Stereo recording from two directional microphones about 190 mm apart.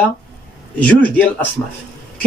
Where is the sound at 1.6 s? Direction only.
20° left (ahead or behind).